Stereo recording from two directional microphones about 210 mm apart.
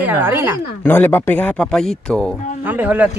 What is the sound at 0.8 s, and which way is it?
Speech, 10° left (ahead or behind).